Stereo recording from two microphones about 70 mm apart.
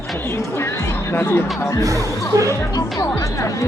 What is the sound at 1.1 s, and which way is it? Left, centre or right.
Speech, left.